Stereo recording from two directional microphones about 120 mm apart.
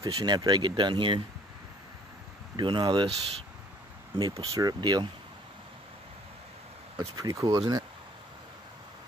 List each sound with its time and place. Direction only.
0.0 s speech: 35° right (ahead or behind)
2.5 s speech: 40° right (ahead or behind)
4.2 s speech: 30° right (ahead or behind)
7.0 s speech: 30° right (ahead or behind)